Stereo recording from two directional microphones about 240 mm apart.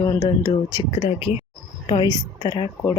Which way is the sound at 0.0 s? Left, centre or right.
Centre.